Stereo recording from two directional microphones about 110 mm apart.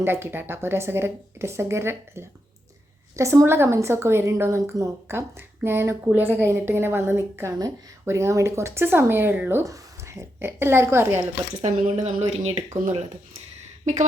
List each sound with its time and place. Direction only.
0.0 s a woman's voice: 20° right (ahead or behind)
11.6 s speech: 90° right